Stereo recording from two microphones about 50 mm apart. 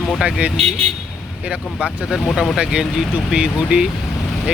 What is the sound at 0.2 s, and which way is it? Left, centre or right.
Speech, right.